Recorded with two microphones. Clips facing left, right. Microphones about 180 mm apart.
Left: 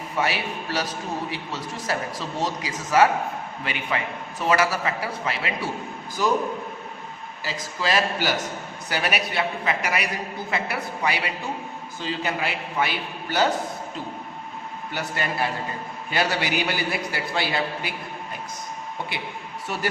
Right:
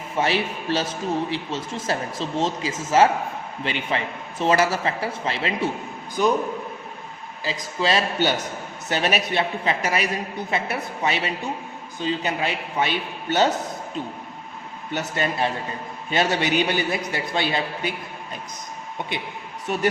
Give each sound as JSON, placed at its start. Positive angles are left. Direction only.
{"t": 0.2, "sound": "a man's voice", "side_deg": -25}
{"t": 7.4, "sound": "a man's voice", "side_deg": -20}
{"t": 14.9, "sound": "a man's voice", "side_deg": -20}
{"t": 19.6, "sound": "a man's voice", "side_deg": -20}